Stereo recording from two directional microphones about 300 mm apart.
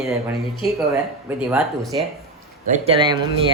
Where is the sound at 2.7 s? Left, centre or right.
Centre.